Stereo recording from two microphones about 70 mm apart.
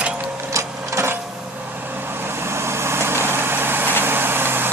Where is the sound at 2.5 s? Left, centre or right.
Right.